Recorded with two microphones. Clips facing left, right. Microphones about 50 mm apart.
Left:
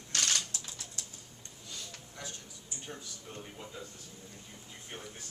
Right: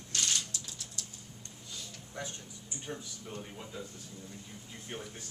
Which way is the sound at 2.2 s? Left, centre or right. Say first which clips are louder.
Right 4 dB; right.